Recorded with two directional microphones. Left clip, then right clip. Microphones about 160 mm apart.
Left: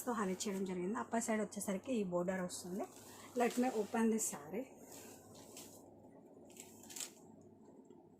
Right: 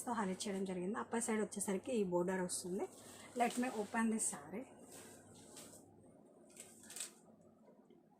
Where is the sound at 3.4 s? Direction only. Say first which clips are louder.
Left 2 dB; 35° right (ahead or behind).